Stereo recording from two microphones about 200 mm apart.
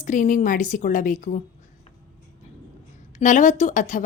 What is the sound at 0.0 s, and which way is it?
Speech, 40° left (ahead or behind).